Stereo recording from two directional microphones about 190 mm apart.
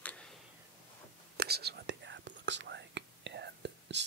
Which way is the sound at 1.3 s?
55° right (ahead or behind).